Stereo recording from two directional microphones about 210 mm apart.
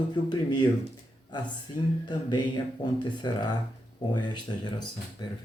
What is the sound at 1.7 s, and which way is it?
Speech, 90° left.